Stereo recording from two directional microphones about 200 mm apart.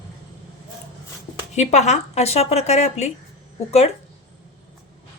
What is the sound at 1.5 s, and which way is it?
Speech, 35° left (ahead or behind).